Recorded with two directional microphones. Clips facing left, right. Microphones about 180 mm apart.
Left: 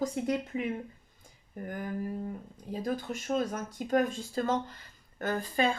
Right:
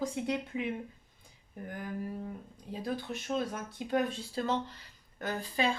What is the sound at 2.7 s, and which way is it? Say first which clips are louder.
Speech: left 3 dB; 45° left (ahead or behind).